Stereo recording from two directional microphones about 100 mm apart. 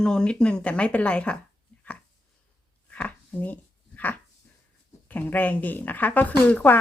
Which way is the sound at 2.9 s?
15° left (ahead or behind).